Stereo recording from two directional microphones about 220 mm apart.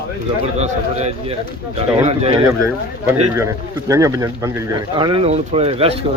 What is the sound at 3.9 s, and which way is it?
Speech, 15° right (ahead or behind).